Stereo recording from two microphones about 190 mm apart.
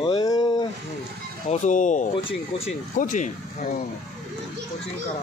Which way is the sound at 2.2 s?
30° left (ahead or behind).